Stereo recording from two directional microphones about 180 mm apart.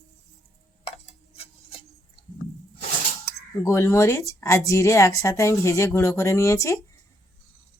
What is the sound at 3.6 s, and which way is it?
Speech, 15° left (ahead or behind).